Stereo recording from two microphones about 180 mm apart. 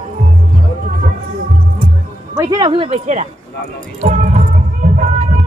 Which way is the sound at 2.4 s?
20° right (ahead or behind).